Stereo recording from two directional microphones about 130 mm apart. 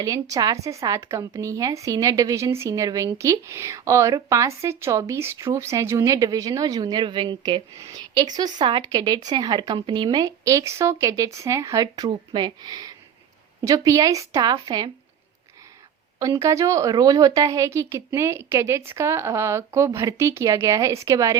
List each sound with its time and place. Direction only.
0.0 s a woman's voice: 30° right (ahead or behind)
16.1 s a woman's voice: 25° right (ahead or behind)